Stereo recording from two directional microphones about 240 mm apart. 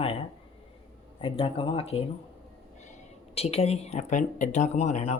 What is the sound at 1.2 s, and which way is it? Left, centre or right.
Speech, left.